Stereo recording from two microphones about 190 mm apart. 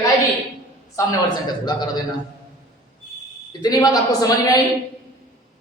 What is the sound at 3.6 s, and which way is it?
Speech, 20° left (ahead or behind).